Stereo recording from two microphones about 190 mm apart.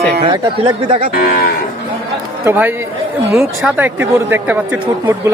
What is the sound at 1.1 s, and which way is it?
Cattle, 50° left (ahead or behind).